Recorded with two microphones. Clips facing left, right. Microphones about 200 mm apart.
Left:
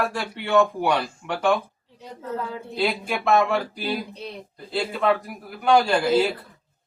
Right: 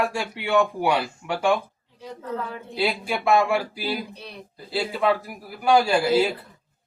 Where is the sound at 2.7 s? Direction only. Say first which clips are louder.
Even; 10° right (ahead or behind).